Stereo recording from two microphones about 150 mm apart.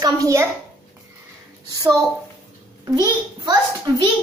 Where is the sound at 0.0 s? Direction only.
20° right (ahead or behind).